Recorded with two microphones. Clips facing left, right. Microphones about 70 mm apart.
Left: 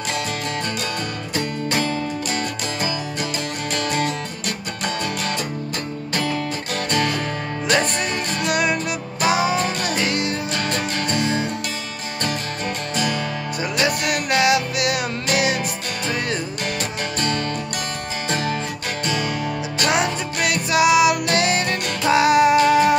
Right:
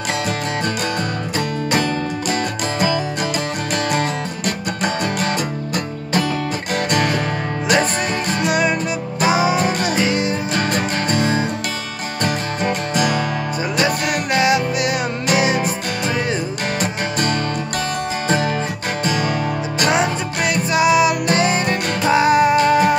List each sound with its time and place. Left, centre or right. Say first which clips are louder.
1.7 s music: right 4 dB; right
3.7 s music: right 3 dB; right
6.7 s music: right 4 dB; right
8.5 s music: right 2 dB; centre
11.1 s music: right 3 dB; right
12.9 s music: right 3 dB; right
13.7 s music: right 2 dB; centre
19.9 s music: right 2 dB; centre